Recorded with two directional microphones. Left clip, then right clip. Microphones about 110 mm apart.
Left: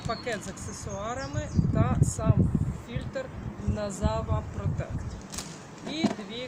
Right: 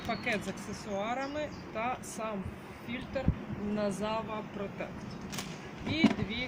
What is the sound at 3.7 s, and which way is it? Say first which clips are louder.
Speech: left 2 dB; 20° left (ahead or behind).